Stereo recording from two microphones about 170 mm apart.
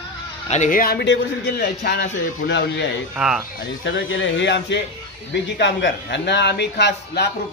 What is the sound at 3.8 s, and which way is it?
Speech, 90° left.